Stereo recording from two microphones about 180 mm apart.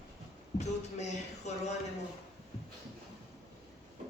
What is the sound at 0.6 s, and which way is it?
A man's voice, 40° left (ahead or behind).